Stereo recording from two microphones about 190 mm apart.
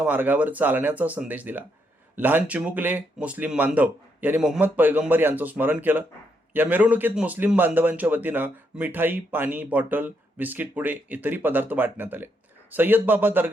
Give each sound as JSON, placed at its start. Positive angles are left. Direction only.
{"t": 0.0, "sound": "a man's voice", "side_deg": -10}